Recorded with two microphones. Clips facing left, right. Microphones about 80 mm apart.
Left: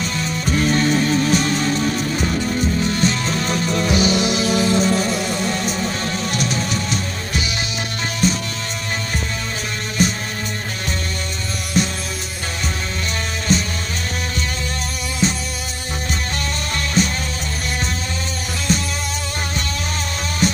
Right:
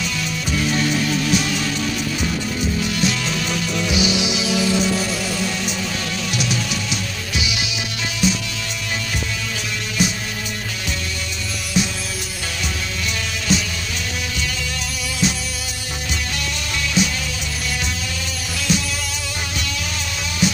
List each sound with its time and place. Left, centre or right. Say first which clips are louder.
0.0 s music: left 2 dB; left
2.2 s music: left 3 dB; left
2.8 s music: left 2 dB; left
10.0 s music: left 2 dB; left
11.7 s music: left 2 dB; left
13.5 s music: left 1 dB; left
15.2 s music: left 2 dB; left
17.0 s music: left 1 dB; left
18.7 s music: left 1 dB; left
20.4 s music: left 1 dB; left